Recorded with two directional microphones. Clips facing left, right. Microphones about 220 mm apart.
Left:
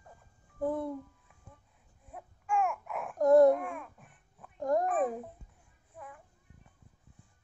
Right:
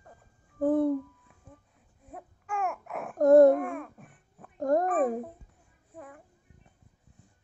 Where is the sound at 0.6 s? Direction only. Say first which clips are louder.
Right 8 dB; 50° right (ahead or behind).